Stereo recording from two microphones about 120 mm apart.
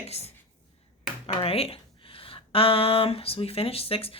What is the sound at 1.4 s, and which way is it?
Speech, 50° left (ahead or behind).